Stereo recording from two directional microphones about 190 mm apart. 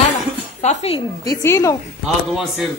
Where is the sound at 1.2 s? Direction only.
15° left (ahead or behind).